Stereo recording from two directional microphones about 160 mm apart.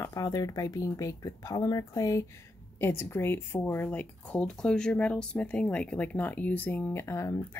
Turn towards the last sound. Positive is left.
turn(degrees=15)  # may be behind; listen again after turning